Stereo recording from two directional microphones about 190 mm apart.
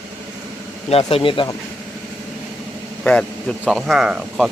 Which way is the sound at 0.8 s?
30° left (ahead or behind).